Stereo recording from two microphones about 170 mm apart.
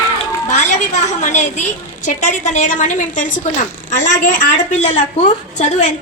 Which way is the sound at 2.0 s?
45° left (ahead or behind).